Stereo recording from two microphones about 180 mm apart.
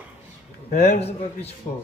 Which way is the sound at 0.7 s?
35° left (ahead or behind).